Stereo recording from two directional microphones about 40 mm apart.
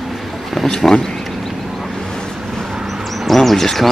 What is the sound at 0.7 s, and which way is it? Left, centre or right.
Speech, centre.